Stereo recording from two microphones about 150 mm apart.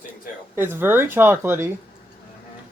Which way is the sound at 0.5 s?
15° right (ahead or behind).